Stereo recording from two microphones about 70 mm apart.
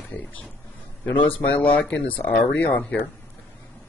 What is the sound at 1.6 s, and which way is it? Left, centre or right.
Speech, centre.